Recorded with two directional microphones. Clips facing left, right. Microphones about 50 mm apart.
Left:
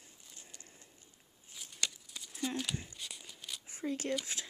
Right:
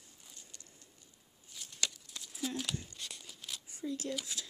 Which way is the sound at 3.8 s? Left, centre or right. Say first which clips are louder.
Left 2 dB; left.